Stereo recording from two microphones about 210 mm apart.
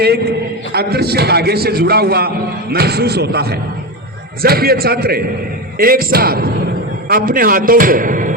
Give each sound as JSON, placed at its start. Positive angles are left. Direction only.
{"t": 0.7, "sound": "a man's voice", "side_deg": -50}